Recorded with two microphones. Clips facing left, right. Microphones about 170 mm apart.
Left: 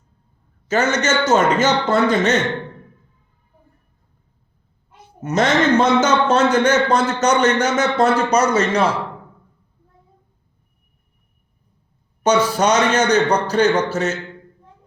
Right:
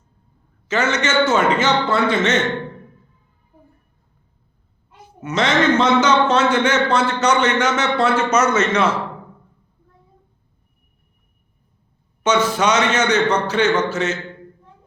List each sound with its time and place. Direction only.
0.7 s a man's voice: 40° left (ahead or behind)
5.2 s a man's voice: 40° left (ahead or behind)
12.2 s a man's voice: 40° left (ahead or behind)